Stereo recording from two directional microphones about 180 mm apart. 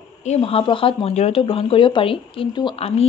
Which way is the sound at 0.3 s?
30° left (ahead or behind).